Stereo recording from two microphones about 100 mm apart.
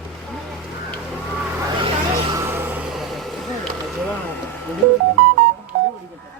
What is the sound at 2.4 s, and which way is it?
Vehicle, 25° right (ahead or behind).